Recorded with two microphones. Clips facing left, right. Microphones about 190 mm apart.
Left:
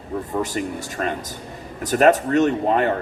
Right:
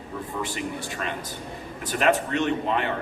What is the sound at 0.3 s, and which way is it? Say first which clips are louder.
A man's voice: left 6 dB; 45° left (ahead or behind).